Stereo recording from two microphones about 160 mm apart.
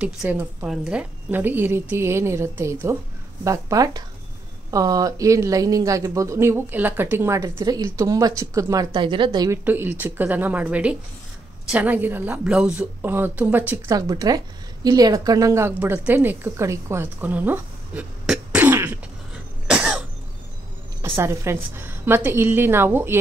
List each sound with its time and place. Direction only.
0.0 s a woman's voice: 5° right (ahead or behind); by 9.6 s 25° right (ahead or behind)
9.7 s a woman's voice: 10° right (ahead or behind)
13.9 s a woman's voice: 25° right (ahead or behind); by 20.0 s 5° right (ahead or behind)
21.2 s a woman's voice: 15° right (ahead or behind)